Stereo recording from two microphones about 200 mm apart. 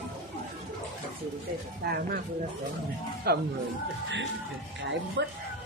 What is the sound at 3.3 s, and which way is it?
Speech, 50° right (ahead or behind).